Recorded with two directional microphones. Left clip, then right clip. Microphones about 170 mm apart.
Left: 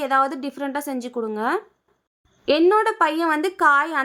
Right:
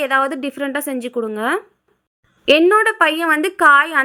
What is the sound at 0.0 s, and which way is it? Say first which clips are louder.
A woman's voice: right 3 dB; 15° right (ahead or behind).